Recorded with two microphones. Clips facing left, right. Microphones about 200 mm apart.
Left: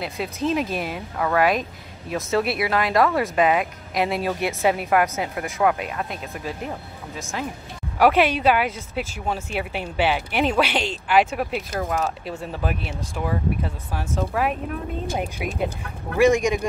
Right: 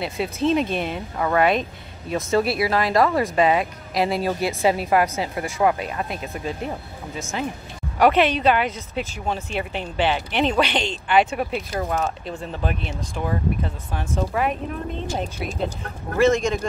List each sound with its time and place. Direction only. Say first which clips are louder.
0.0 s speech: right 3 dB; centre (ahead or behind)
16.2 s speech: left 1 dB; 15° left (ahead or behind)